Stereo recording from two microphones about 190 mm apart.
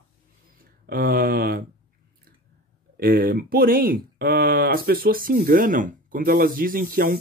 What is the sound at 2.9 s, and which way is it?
Speech, 50° right (ahead or behind).